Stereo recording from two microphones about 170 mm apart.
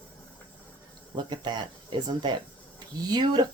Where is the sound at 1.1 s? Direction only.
25° right (ahead or behind).